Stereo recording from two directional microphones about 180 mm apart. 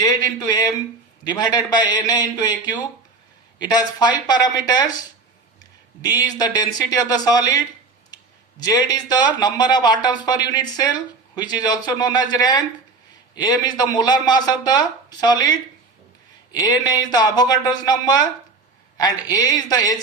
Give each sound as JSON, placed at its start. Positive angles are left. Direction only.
{"t": 0.0, "sound": "speech", "side_deg": 20}
{"t": 6.0, "sound": "speech", "side_deg": 20}